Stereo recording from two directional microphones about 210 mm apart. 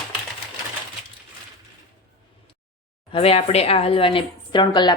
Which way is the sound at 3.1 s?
30° left (ahead or behind).